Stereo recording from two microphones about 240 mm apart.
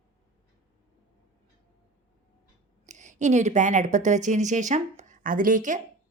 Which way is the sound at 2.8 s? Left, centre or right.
Right.